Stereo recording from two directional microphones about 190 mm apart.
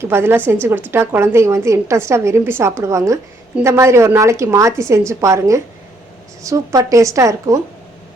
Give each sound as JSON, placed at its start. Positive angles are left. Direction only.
{"t": 0.0, "sound": "a woman's voice", "side_deg": -15}